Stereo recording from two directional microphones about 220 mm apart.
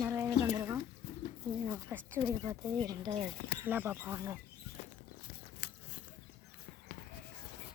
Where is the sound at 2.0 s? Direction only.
10° right (ahead or behind).